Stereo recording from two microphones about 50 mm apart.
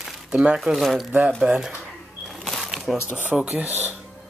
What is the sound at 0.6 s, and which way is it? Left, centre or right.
Speech, centre.